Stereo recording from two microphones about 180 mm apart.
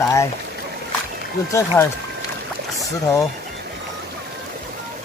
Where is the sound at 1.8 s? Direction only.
10° left (ahead or behind).